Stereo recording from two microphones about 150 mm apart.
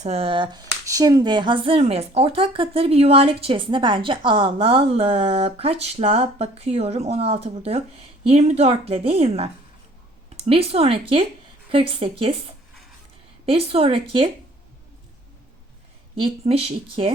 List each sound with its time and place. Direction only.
0.0 s a woman's voice: 40° right (ahead or behind)
16.1 s speech: 40° right (ahead or behind)